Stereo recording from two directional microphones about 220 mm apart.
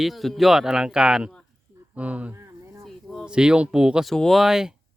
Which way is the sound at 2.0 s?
5° right (ahead or behind).